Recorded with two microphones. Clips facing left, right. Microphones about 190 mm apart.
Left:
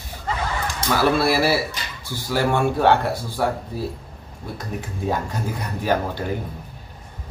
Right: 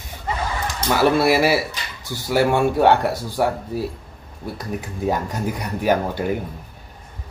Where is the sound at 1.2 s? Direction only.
15° right (ahead or behind).